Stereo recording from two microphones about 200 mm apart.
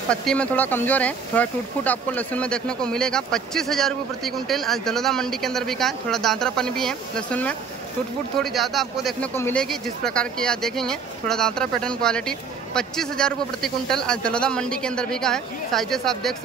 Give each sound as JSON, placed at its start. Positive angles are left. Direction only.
{"t": 0.1, "sound": "speech", "side_deg": 5}